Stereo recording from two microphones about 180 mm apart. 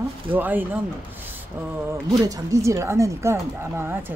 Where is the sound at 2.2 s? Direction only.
20° right (ahead or behind).